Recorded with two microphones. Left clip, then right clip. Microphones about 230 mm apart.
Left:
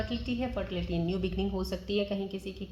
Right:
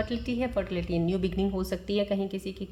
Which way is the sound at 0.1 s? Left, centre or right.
Right.